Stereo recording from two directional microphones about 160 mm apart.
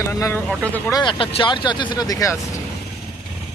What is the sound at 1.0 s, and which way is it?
Speech, 30° left (ahead or behind).